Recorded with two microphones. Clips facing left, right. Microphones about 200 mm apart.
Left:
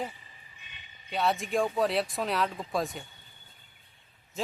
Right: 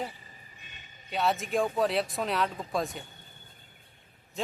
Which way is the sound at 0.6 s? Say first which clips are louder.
Right 2 dB; 45° right (ahead or behind).